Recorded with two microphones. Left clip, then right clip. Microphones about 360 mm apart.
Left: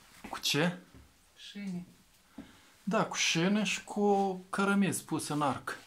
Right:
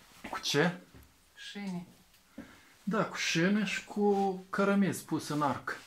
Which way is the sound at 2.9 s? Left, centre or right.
Centre.